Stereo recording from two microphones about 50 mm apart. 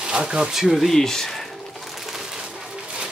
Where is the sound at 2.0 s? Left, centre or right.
Centre.